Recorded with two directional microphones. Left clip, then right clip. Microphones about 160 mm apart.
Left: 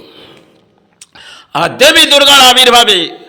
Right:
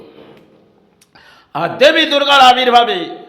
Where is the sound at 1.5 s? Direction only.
20° left (ahead or behind).